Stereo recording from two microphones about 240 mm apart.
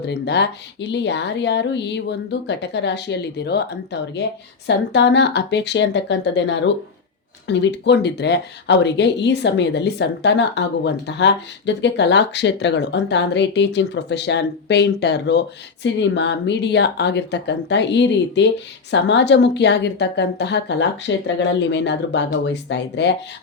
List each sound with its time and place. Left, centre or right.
0.0 s speech: left